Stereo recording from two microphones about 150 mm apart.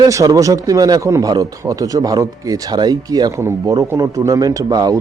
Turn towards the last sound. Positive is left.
turn(degrees=-25)  # may be behind; listen again after turning